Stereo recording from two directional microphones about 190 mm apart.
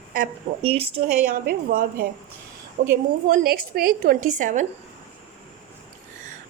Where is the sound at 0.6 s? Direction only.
30° right (ahead or behind).